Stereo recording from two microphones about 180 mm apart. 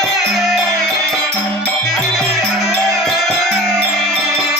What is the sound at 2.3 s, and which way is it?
Music, 20° right (ahead or behind).